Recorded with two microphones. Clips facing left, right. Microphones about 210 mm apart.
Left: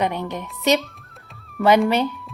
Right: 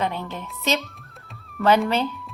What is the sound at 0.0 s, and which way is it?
A woman's voice, 15° left (ahead or behind).